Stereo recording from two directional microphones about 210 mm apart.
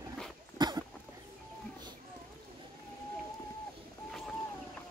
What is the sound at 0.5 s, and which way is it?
Cough, 20° right (ahead or behind).